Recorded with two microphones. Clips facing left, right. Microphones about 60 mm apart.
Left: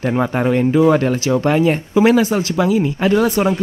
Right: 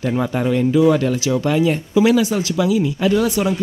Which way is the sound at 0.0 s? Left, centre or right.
Left.